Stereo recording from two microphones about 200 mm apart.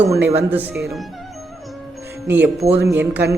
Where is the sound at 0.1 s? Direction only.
10° right (ahead or behind).